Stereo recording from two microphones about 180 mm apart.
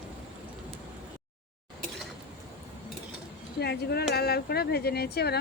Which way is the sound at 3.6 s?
65° left (ahead or behind).